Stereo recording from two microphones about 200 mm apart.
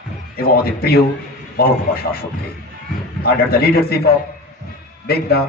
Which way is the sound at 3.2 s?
50° left (ahead or behind).